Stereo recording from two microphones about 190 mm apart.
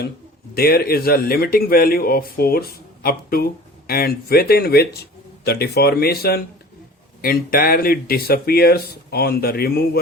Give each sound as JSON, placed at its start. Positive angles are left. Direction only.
{"t": 0.5, "sound": "speech", "side_deg": 55}